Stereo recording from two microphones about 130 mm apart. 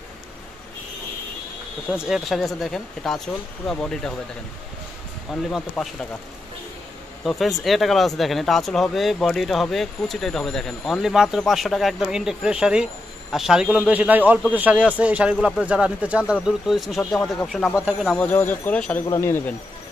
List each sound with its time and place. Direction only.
1.9 s speech: 5° right (ahead or behind)
5.3 s speech: 5° left (ahead or behind)
7.2 s speech: centre (ahead or behind)
19.0 s speech: 20° left (ahead or behind)